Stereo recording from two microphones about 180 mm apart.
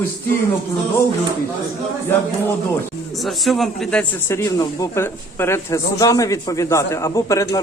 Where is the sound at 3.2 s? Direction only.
Centre (ahead or behind).